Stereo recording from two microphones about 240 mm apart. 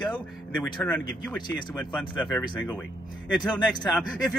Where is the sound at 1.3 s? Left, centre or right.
Centre.